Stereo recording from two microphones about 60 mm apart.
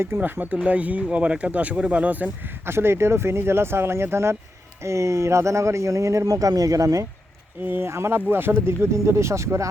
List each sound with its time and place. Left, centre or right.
0.2 s speech: right
2.6 s a man's voice: right
7.6 s speech: right
7.9 s speech: right